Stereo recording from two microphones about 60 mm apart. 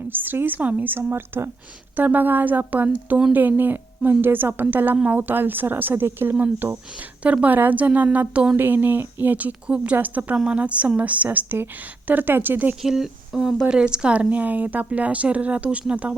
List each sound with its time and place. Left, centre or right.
0.1 s a woman's voice: right
8.5 s a woman's voice: right
12.8 s a woman's voice: centre